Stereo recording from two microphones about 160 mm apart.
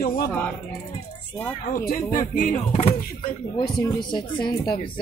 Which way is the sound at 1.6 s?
55° left (ahead or behind).